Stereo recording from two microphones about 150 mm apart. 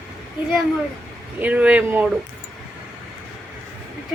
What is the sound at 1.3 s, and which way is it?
Speech, 10° right (ahead or behind).